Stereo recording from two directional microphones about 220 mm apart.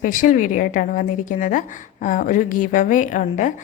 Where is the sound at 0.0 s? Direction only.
35° left (ahead or behind).